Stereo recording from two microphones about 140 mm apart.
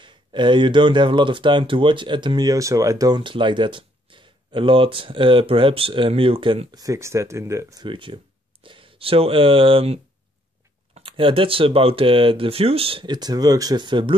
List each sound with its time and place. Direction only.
0.0 s speech: 35° right (ahead or behind)
3.2 s speech: 35° right (ahead or behind)
6.8 s speech: 20° right (ahead or behind)
7.8 s speech: 35° right (ahead or behind)
11.0 s speech: 40° right (ahead or behind)